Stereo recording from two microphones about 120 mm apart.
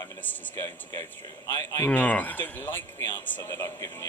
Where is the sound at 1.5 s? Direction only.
20° left (ahead or behind).